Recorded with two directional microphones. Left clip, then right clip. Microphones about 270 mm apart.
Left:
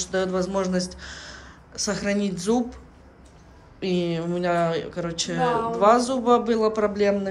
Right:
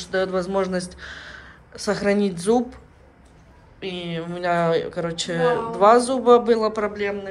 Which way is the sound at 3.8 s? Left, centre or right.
Centre.